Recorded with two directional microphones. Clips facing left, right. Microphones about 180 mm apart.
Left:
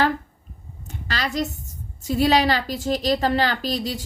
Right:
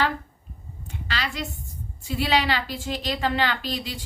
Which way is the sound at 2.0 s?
40° left (ahead or behind).